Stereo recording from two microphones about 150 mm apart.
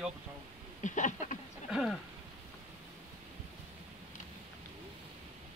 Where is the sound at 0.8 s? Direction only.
55° left (ahead or behind).